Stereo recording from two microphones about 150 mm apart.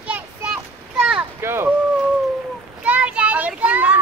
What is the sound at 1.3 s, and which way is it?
Speech, 15° right (ahead or behind).